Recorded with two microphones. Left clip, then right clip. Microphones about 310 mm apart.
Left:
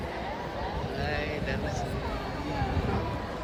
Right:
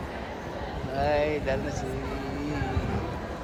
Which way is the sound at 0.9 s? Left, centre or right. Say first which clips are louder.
Right 10 dB; centre.